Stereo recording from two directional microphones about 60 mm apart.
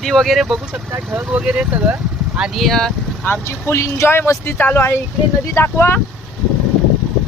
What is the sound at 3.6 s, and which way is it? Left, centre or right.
Speech, left.